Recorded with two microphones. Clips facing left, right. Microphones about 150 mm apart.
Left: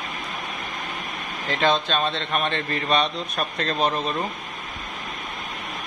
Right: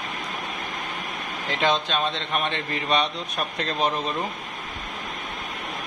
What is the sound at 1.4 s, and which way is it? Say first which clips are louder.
Speech: left 2 dB; 15° right (ahead or behind).